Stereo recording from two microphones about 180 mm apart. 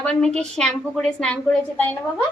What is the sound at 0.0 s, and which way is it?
A woman's voice, 5° left (ahead or behind).